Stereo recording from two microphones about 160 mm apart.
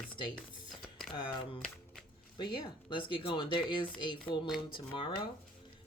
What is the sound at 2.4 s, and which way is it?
Speech, 30° left (ahead or behind).